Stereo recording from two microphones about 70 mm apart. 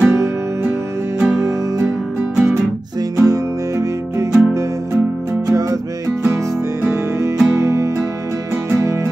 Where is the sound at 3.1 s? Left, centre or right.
Right.